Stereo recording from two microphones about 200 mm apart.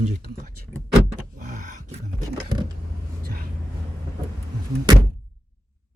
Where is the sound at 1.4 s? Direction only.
40° right (ahead or behind).